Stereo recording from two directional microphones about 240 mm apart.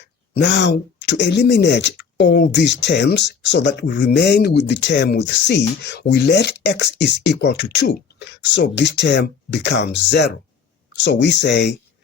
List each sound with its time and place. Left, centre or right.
0.4 s speech: left